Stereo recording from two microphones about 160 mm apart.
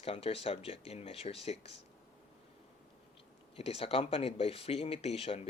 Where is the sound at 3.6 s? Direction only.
40° left (ahead or behind).